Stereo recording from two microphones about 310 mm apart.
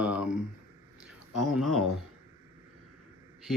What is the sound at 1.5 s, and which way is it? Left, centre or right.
Speech, centre.